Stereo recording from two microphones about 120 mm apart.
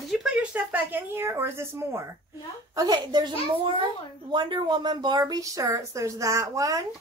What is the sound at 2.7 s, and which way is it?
A woman's voice, 35° right (ahead or behind).